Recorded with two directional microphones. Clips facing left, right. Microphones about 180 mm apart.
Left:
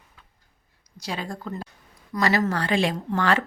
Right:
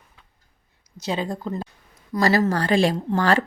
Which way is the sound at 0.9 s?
25° right (ahead or behind).